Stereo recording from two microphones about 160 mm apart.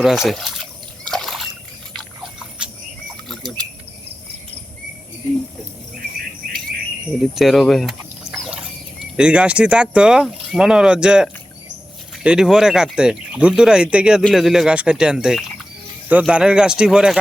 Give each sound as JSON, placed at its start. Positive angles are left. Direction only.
{"t": 0.0, "sound": "speech", "side_deg": 0}
{"t": 1.0, "sound": "splash", "side_deg": 5}
{"t": 2.6, "sound": "a sound", "side_deg": -5}
{"t": 3.2, "sound": "bird", "side_deg": 0}
{"t": 7.2, "sound": "a sound", "side_deg": 0}
{"t": 9.1, "sound": "speech", "side_deg": -5}